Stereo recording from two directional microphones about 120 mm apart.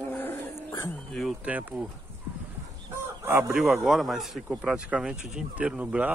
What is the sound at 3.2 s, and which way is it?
Chicken, 20° right (ahead or behind).